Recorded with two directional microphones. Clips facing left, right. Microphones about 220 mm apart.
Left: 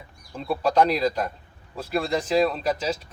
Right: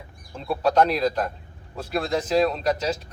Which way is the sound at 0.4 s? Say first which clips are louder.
Right 1 dB; centre (ahead or behind).